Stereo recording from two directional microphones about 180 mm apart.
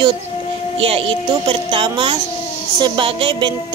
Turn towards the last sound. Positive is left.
turn(degrees=-30)  # may be behind; listen again after turning